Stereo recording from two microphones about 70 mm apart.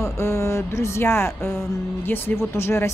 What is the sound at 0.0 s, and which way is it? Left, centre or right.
Speech, left.